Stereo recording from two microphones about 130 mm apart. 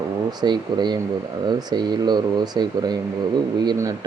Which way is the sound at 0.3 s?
35° right (ahead or behind).